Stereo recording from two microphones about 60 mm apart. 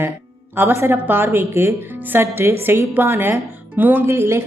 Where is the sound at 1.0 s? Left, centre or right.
Right.